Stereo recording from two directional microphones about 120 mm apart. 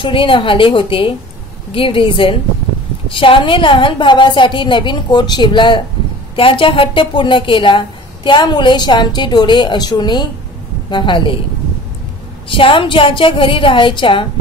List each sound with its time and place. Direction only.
0.0 s a woman's voice: 45° left (ahead or behind)
12.4 s a woman's voice: 45° left (ahead or behind)